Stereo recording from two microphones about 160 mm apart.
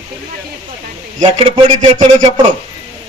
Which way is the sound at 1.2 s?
35° right (ahead or behind).